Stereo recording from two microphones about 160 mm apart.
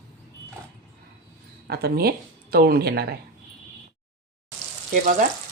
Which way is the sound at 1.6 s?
80° right.